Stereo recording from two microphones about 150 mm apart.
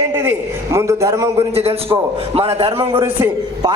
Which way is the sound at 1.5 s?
40° right (ahead or behind).